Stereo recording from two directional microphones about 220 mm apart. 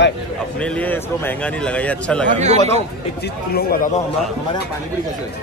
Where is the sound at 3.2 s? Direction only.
45° left (ahead or behind).